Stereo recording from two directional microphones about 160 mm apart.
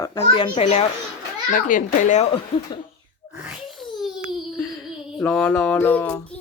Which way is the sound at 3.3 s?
5° right (ahead or behind).